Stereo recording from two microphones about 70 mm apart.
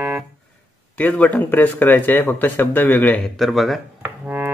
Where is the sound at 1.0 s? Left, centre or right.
Left.